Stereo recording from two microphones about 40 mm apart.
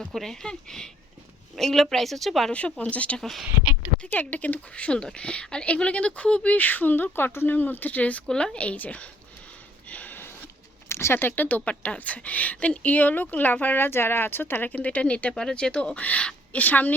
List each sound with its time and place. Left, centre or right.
0.1 s a woman's voice: centre
0.4 s a woman's voice: centre
2.5 s speech: left
3.2 s a woman's voice: centre
4.0 s speech: left
4.7 s speech: left
6.5 s speech: left
9.9 s sniff: left
10.9 s speech: left
11.3 s speech: left
11.7 s speech: left
14.7 s speech: left
15.3 s speech: centre
16.0 s speech: left